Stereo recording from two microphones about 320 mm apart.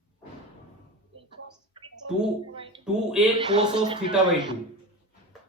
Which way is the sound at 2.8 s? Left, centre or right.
Centre.